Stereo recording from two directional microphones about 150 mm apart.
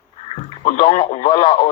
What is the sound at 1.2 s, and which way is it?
Speech, 35° left (ahead or behind).